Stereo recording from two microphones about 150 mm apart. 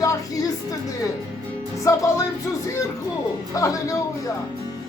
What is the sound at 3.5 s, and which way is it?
Speech, 20° left (ahead or behind).